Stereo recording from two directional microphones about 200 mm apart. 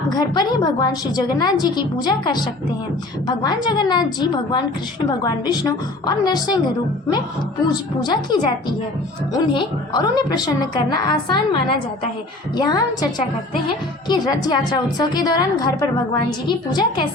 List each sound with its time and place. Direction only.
0.1 s a woman's voice: 20° left (ahead or behind)
8.0 s a woman's voice: 20° left (ahead or behind)